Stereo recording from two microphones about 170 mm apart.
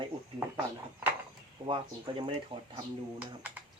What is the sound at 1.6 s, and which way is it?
Speech, 25° right (ahead or behind).